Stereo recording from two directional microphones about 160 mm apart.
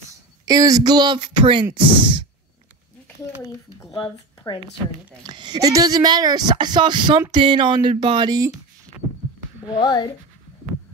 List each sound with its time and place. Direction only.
0.5 s speech: 20° right (ahead or behind)
3.9 s speech: 30° left (ahead or behind)
5.2 s speech: 30° right (ahead or behind)
9.8 s speech: 25° left (ahead or behind)